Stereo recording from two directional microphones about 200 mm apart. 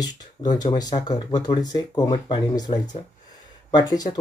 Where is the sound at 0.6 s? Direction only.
20° left (ahead or behind).